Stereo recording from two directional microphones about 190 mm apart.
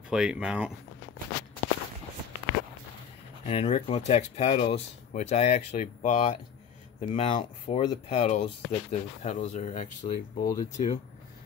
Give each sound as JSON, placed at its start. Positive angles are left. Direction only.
{"t": 0.1, "sound": "speech", "side_deg": -5}
{"t": 3.4, "sound": "speech", "side_deg": 30}
{"t": 10.5, "sound": "speech", "side_deg": 20}